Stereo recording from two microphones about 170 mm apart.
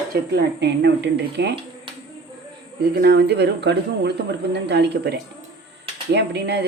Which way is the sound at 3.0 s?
75° right (ahead or behind).